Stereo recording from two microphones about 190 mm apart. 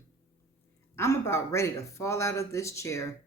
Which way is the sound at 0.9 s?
15° left (ahead or behind).